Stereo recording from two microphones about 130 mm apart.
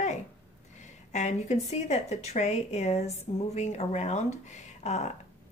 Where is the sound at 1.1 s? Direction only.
65° left (ahead or behind).